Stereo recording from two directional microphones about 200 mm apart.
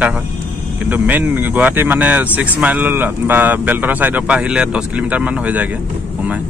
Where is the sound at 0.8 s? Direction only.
10° right (ahead or behind).